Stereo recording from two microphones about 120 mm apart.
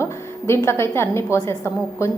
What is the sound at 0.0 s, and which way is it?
A woman's voice, 20° left (ahead or behind).